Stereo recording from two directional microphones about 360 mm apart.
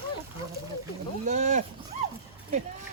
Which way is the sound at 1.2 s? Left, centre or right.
Centre.